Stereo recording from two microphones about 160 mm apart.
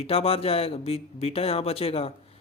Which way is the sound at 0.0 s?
35° left (ahead or behind).